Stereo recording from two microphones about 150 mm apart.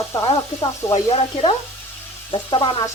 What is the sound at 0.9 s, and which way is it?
Speech, 40° left (ahead or behind).